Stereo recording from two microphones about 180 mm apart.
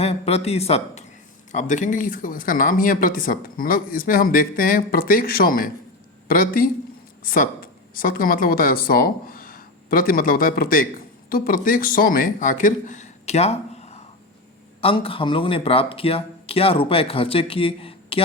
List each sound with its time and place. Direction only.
0.0 s speech: 35° left (ahead or behind)